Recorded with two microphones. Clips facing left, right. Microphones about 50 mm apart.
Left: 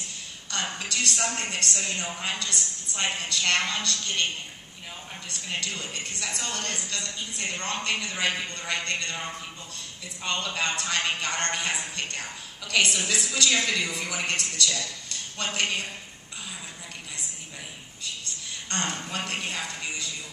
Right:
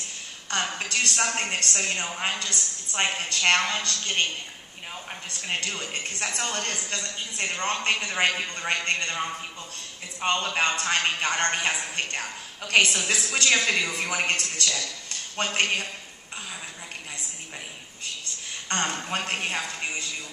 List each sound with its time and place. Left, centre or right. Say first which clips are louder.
0.5 s speech: right 3 dB; right
5.6 s speech: right 2 dB; right
10.2 s speech: right 4 dB; right
18.7 s a woman's voice: right 3 dB; right